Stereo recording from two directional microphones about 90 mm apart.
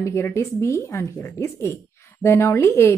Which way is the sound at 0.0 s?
30° left (ahead or behind).